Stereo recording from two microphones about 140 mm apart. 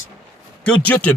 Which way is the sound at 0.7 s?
10° left (ahead or behind).